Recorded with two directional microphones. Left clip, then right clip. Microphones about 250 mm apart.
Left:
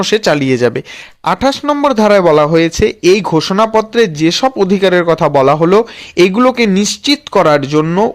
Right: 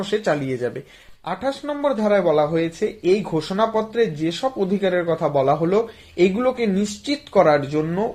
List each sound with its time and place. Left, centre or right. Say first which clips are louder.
0.0 s a man's voice: left 10 dB; left